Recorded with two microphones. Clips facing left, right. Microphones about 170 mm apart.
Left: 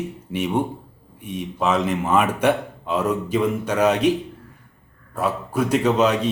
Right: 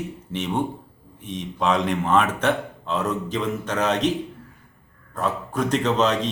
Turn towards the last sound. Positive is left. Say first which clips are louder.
# left 3 dB
turn(degrees=10)  # may be behind; listen again after turning